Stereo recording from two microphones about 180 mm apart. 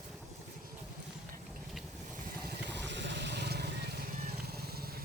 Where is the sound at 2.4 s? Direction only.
70° right (ahead or behind).